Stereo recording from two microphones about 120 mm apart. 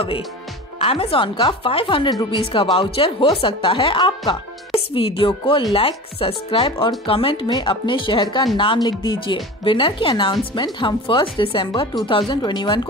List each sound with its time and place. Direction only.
0.7 s speech: 55° left (ahead or behind); by 12.8 s 40° left (ahead or behind)